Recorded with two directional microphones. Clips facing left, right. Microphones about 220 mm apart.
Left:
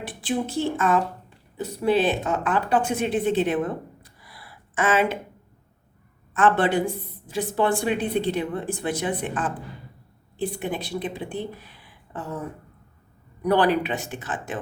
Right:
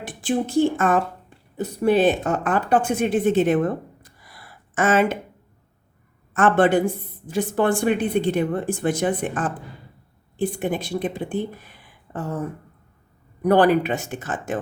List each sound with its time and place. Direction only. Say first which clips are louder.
0.2 s a woman's voice: right 6 dB; 45° right (ahead or behind)
4.0 s a sound: even; 45° right (ahead or behind)
6.3 s a woman's voice: right 3 dB; 50° right (ahead or behind)
13.4 s a woman's voice: right 4 dB; 45° right (ahead or behind)